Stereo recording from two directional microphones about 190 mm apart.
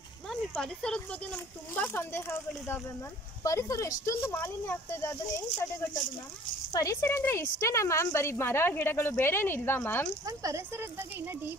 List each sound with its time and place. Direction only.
0.3 s speech: 5° left (ahead or behind)
6.7 s speech: 15° left (ahead or behind)
10.2 s speech: 15° right (ahead or behind)